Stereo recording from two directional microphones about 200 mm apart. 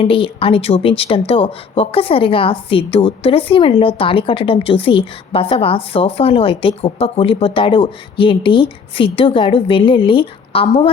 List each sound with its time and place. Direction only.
0.0 s speech: 25° left (ahead or behind)